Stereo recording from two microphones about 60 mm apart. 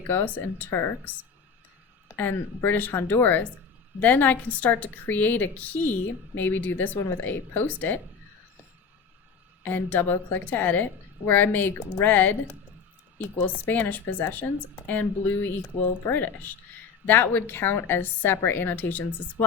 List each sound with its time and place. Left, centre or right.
0.1 s a woman's voice: left
0.7 s speech: left
2.1 s a woman's voice: left
9.6 s a woman's voice: left
16.0 s a woman's voice: left